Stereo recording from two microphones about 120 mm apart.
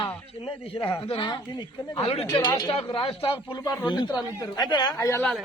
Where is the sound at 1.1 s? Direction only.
40° left (ahead or behind).